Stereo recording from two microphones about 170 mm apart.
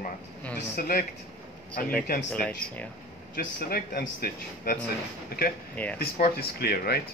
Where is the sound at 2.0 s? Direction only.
55° left (ahead or behind).